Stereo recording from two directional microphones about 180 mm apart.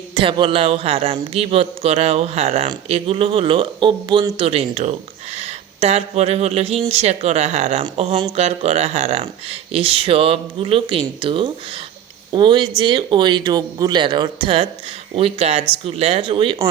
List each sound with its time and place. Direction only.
0.1 s a man's voice: 30° right (ahead or behind)